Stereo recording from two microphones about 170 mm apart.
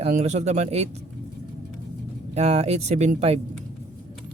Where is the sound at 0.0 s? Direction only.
40° right (ahead or behind).